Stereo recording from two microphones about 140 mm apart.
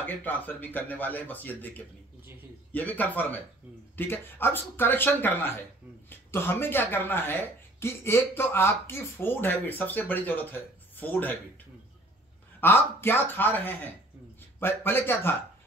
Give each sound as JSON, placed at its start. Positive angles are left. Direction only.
{"t": 0.0, "sound": "speech", "side_deg": 15}
{"t": 12.5, "sound": "speech", "side_deg": 15}